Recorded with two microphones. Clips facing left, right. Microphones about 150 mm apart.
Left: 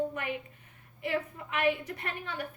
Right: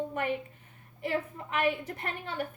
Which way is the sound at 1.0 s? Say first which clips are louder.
Right 1 dB; 35° right (ahead or behind).